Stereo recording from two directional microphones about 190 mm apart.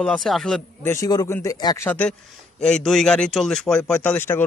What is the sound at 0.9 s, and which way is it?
A man's voice, 20° left (ahead or behind).